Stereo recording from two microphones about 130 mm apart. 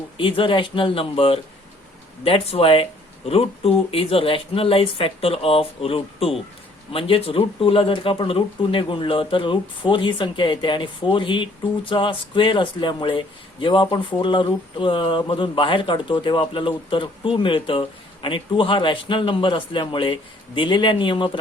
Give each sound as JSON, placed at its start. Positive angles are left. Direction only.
{"t": 0.2, "sound": "speech", "side_deg": 40}